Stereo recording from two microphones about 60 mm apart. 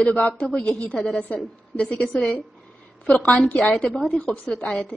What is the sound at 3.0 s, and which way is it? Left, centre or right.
Speech, centre.